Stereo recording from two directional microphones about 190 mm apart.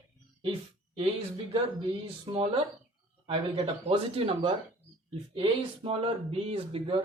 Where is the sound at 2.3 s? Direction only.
30° right (ahead or behind).